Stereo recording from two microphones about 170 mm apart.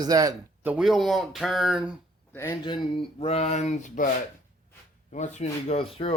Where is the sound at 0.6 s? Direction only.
5° right (ahead or behind).